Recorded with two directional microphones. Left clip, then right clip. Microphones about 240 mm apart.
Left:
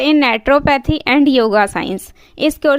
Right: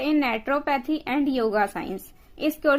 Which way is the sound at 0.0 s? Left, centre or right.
Left.